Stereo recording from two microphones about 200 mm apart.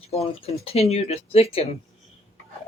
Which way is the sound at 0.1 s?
30° left (ahead or behind).